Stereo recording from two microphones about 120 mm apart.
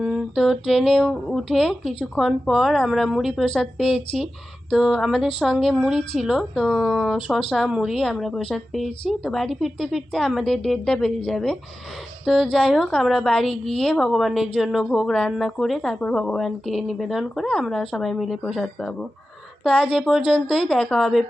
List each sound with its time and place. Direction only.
0.0 s speech: 5° right (ahead or behind)